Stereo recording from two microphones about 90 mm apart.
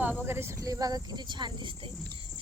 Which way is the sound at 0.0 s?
20° right (ahead or behind).